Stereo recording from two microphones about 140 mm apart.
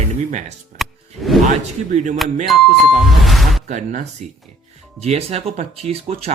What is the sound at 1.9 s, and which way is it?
Speech, 65° right (ahead or behind).